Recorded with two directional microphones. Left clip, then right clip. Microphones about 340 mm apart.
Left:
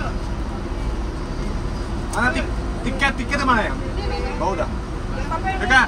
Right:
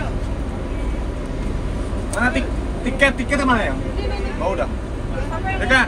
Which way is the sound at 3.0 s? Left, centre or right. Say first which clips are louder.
Right 4 dB; centre.